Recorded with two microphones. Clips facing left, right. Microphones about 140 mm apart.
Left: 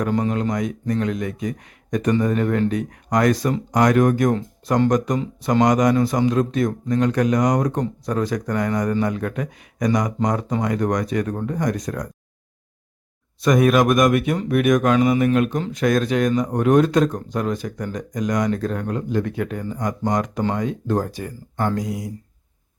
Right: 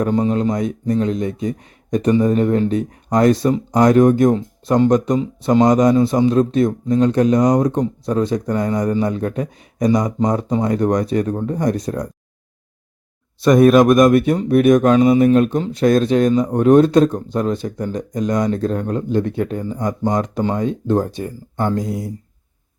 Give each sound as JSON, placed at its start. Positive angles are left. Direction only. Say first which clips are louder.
{"t": 0.1, "sound": "speech", "louder": "right 4 dB", "side_deg": -25}
{"t": 13.4, "sound": "speech", "louder": "right 6 dB", "side_deg": -30}